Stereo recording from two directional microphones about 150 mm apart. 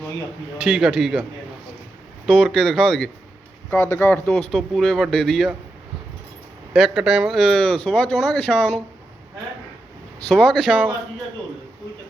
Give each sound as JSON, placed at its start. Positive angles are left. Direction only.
{"t": 0.6, "sound": "speech", "side_deg": -5}
{"t": 2.2, "sound": "speech", "side_deg": 0}
{"t": 6.7, "sound": "speech", "side_deg": 0}
{"t": 10.5, "sound": "speech", "side_deg": -5}